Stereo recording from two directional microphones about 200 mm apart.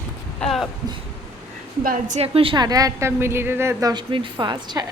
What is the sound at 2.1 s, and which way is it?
A woman's voice, 30° right (ahead or behind).